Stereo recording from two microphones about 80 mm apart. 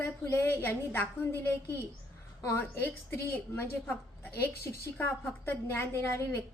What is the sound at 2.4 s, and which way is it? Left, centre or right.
Speech, left.